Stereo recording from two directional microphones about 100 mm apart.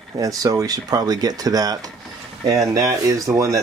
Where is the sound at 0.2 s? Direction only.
35° right (ahead or behind).